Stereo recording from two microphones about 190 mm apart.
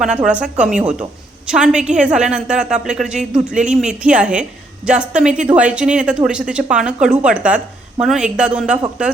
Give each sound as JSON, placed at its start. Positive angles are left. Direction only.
{"t": 0.3, "sound": "a woman's voice", "side_deg": -5}